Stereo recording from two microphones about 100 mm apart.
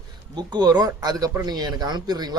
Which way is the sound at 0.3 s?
45° right (ahead or behind).